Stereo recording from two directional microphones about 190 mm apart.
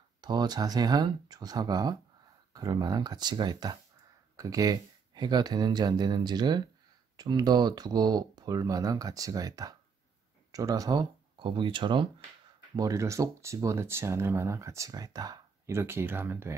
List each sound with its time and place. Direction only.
0.2 s speech: 20° right (ahead or behind)